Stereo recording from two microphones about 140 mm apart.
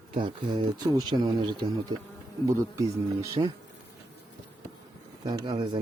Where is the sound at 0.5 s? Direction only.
30° right (ahead or behind).